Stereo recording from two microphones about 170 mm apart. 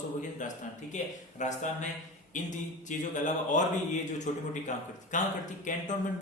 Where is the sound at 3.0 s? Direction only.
45° left (ahead or behind).